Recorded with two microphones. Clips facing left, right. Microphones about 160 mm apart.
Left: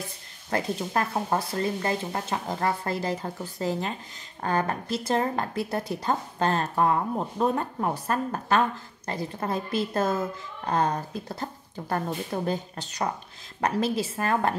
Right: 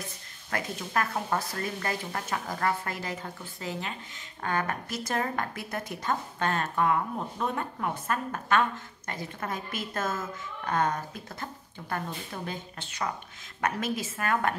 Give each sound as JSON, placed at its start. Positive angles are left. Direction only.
{"t": 0.5, "sound": "speech", "side_deg": 30}